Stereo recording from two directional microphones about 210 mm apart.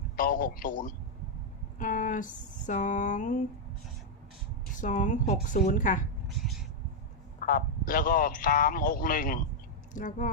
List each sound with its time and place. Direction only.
0.2 s speech: 40° left (ahead or behind)
4.7 s speech: 35° left (ahead or behind)
6.2 s cat: centre (ahead or behind)
7.4 s a man's voice: 40° left (ahead or behind)